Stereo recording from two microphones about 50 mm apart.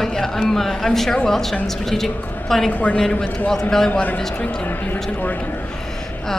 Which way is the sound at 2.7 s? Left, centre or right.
Left.